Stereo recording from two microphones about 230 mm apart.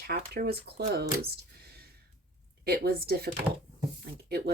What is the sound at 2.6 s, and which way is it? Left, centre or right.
Speech, right.